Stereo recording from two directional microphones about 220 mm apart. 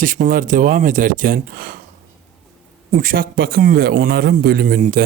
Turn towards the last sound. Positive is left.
turn(degrees=-40)  # may be behind; listen again after turning